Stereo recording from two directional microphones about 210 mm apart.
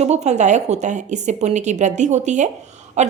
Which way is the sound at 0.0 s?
30° right (ahead or behind).